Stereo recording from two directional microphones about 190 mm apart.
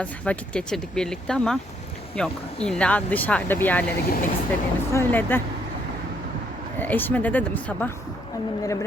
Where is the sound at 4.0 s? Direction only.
55° left (ahead or behind).